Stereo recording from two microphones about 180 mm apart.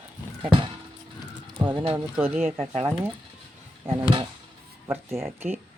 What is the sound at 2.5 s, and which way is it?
Speech, 30° right (ahead or behind).